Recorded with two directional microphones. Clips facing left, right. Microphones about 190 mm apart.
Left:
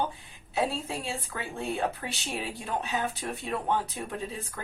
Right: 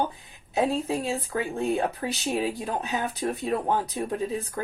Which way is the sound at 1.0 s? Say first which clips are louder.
Right 7 dB; 40° right (ahead or behind).